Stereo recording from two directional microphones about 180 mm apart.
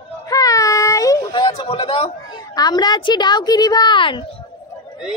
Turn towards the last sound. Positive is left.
turn(degrees=25)  # may be behind; listen again after turning